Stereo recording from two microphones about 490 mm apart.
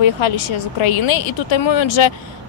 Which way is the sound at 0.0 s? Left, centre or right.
Left.